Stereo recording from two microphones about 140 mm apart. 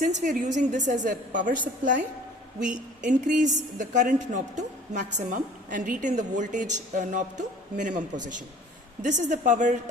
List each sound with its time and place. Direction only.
0.0 s a woman's voice: 65° right (ahead or behind)
3.2 s a woman's voice: 65° right (ahead or behind)